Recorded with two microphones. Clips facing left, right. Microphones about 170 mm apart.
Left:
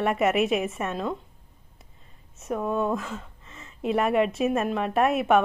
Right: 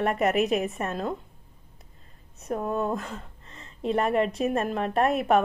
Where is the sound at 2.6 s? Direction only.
Centre (ahead or behind).